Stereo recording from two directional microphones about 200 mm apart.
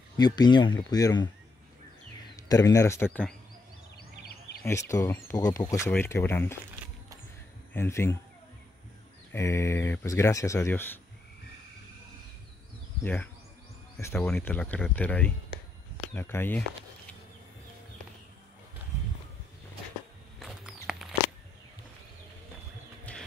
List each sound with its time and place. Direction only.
0.2 s speech: 20° left (ahead or behind)
2.3 s speech: 15° left (ahead or behind)
4.6 s speech: 15° left (ahead or behind)
7.7 s speech: 10° left (ahead or behind)
9.3 s speech: 15° left (ahead or behind)
13.0 s speech: 10° left (ahead or behind)
20.3 s mouse: centre (ahead or behind)